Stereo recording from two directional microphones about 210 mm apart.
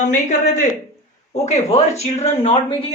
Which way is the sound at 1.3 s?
35° left (ahead or behind).